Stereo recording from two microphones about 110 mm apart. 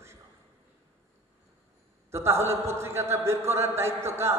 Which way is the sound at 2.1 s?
25° right (ahead or behind).